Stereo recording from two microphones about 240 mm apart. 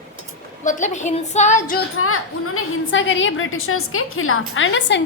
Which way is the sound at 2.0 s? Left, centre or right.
Left.